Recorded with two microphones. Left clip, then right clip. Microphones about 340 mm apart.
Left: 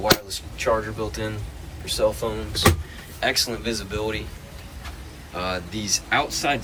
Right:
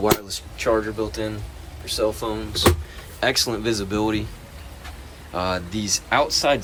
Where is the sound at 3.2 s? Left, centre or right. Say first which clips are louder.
Right 2 dB; centre.